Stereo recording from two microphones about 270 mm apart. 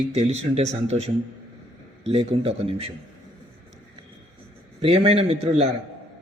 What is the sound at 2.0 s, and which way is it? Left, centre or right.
Speech, right.